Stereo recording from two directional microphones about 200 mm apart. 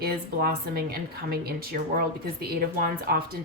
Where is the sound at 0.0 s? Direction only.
50° right (ahead or behind).